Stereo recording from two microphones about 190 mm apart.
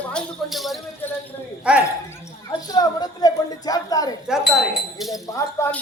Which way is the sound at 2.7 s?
20° left (ahead or behind).